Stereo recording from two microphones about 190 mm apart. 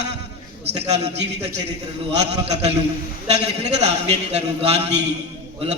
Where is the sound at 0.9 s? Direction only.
35° right (ahead or behind).